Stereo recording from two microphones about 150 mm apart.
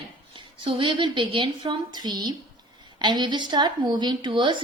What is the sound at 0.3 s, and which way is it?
A woman's voice, 35° right (ahead or behind).